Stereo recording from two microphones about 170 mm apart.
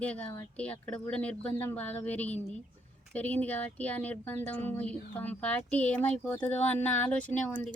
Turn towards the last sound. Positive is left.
turn(degrees=10)  # may be behind; listen again after turning